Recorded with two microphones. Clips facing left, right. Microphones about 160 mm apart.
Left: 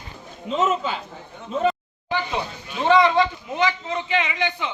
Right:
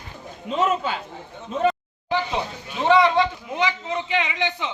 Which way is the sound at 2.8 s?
15° right (ahead or behind).